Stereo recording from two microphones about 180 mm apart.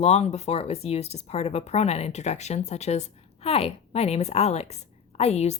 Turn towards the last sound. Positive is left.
turn(degrees=35)  # may be behind; listen again after turning